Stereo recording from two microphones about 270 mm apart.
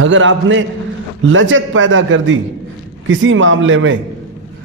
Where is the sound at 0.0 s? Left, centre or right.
Right.